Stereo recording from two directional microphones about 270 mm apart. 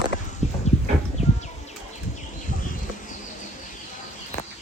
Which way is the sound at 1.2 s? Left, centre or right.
Left.